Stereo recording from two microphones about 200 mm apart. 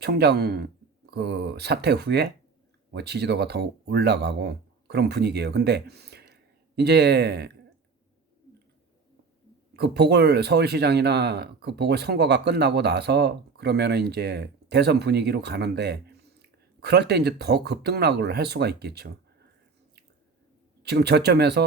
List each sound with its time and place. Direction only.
0.0 s speech: 55° right (ahead or behind)
9.7 s speech: 55° right (ahead or behind)
20.8 s speech: 55° right (ahead or behind)